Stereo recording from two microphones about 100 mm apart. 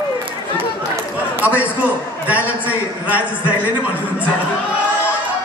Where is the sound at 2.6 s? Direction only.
15° right (ahead or behind).